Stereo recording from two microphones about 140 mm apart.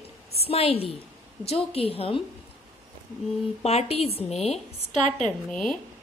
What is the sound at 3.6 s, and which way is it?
Speech, 50° left (ahead or behind).